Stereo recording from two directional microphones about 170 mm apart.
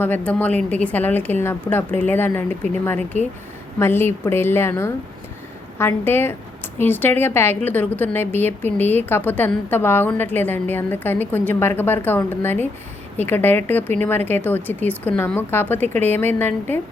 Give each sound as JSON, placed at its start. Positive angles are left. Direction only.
{"t": 0.0, "sound": "a woman's voice", "side_deg": 10}
{"t": 3.1, "sound": "speech", "side_deg": 45}
{"t": 3.8, "sound": "a woman's voice", "side_deg": 15}